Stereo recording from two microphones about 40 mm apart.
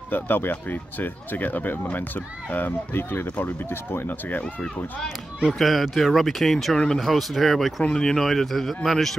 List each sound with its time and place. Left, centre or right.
0.1 s speech: left
3.7 s speech: left
5.5 s speech: centre
7.9 s speech: centre